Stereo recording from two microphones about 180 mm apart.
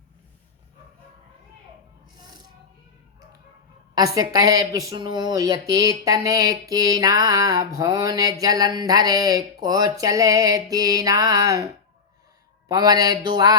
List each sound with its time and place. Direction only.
2.1 s music: 25° right (ahead or behind)
3.9 s speech: 20° right (ahead or behind)